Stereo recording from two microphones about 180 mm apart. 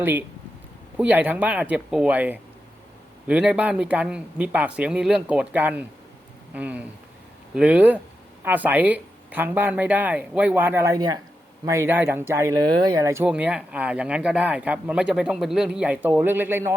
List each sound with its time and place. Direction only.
0.0 s speech: 10° right (ahead or behind)
13.2 s speech: 5° right (ahead or behind)